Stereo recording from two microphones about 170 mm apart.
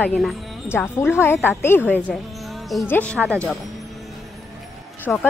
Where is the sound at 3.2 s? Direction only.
15° right (ahead or behind).